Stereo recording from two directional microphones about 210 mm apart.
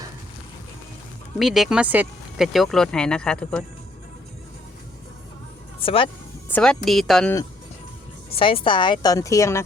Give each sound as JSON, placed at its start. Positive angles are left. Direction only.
{"t": 1.4, "sound": "speech", "side_deg": 0}
{"t": 5.8, "sound": "speech", "side_deg": 25}
{"t": 6.5, "sound": "speech", "side_deg": 5}
{"t": 8.3, "sound": "a woman's voice", "side_deg": 25}